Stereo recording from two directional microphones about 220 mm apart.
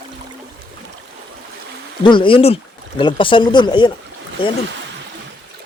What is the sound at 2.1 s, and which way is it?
Speech, 25° left (ahead or behind).